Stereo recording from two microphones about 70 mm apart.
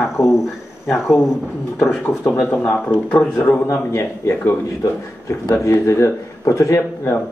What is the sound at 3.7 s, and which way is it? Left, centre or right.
Speech, left.